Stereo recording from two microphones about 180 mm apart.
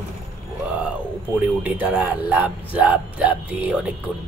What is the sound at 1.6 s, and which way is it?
A man's voice, 10° right (ahead or behind).